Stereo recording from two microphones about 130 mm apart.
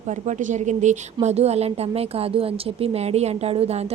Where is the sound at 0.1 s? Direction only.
70° right (ahead or behind).